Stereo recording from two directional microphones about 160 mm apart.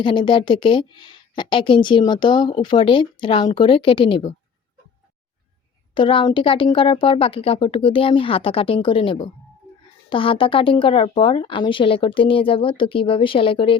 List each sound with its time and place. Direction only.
0.0 s a woman's voice: 30° left (ahead or behind)
5.9 s a woman's voice: 35° left (ahead or behind)